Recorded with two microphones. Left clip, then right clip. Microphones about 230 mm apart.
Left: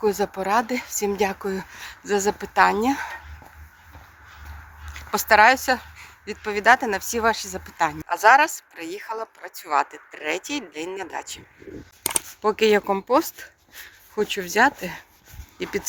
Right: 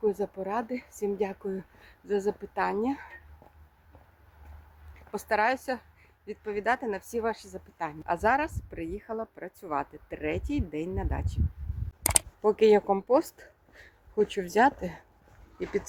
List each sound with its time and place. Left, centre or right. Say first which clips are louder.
0.0 s speech: left 7 dB; centre
4.9 s speech: left 12 dB; centre